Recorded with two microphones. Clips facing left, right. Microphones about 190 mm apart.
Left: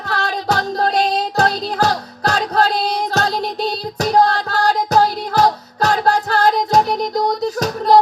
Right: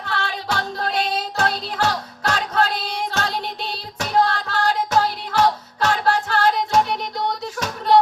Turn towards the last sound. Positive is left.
turn(degrees=40)  # may be behind; listen again after turning